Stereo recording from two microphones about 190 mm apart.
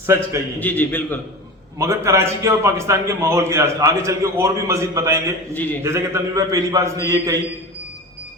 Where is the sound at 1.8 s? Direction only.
15° right (ahead or behind).